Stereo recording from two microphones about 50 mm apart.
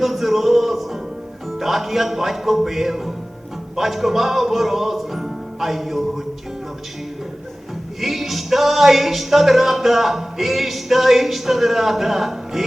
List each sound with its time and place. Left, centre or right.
0.0 s music: centre
8.0 s music: centre